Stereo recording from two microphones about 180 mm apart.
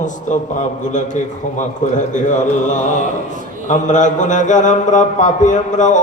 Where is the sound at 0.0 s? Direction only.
45° left (ahead or behind).